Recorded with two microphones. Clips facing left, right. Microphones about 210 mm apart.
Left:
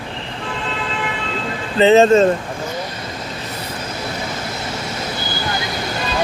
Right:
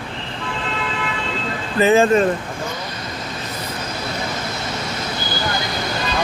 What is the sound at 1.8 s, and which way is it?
Speech, 25° left (ahead or behind).